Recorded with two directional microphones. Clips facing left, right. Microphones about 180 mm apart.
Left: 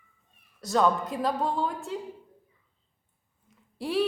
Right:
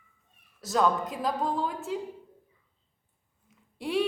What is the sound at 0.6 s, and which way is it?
A woman's voice, centre (ahead or behind).